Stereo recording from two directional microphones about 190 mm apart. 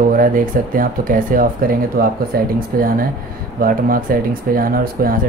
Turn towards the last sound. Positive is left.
turn(degrees=-50)  # may be behind; listen again after turning